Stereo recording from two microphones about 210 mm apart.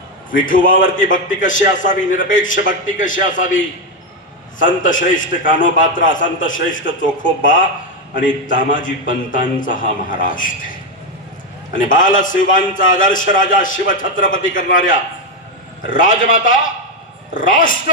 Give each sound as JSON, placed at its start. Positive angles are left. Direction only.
{"t": 0.3, "sound": "a man's voice", "side_deg": 40}
{"t": 4.6, "sound": "a man's voice", "side_deg": 40}
{"t": 11.7, "sound": "a man's voice", "side_deg": 40}